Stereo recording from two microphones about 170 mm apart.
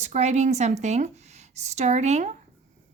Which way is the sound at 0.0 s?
45° right (ahead or behind).